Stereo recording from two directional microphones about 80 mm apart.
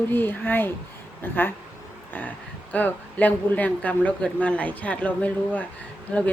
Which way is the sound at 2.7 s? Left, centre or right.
Left.